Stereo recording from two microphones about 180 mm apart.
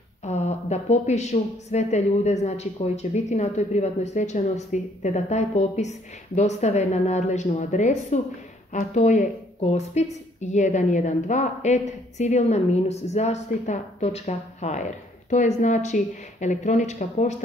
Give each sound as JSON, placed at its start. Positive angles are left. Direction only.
{"t": 0.2, "sound": "a woman's voice", "side_deg": 35}